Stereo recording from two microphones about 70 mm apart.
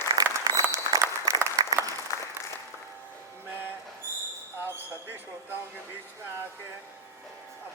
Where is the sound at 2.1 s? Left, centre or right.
Left.